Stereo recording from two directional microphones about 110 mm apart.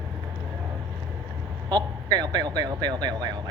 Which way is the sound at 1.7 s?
40° right (ahead or behind).